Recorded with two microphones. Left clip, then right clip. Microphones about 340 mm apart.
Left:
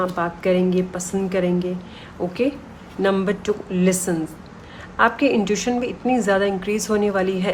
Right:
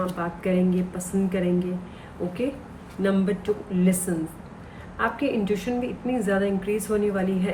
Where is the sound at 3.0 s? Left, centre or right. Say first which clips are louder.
Left 5 dB; centre.